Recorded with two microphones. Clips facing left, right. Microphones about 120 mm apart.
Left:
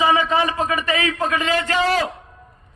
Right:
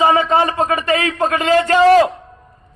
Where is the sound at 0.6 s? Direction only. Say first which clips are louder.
Right 4 dB; 30° right (ahead or behind).